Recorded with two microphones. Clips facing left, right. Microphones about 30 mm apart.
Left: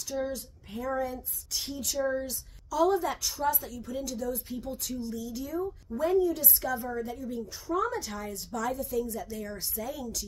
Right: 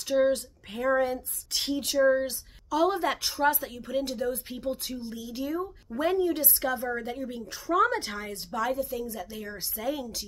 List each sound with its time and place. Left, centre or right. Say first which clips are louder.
0.0 s speech: right 9 dB; right
3.0 s speech: right 4 dB; right
5.9 s speech: even; right
7.6 s speech: right 6 dB; right
8.6 s a woman's voice: left 1 dB; right
9.4 s speech: even; centre
9.8 s speech: right 6 dB; right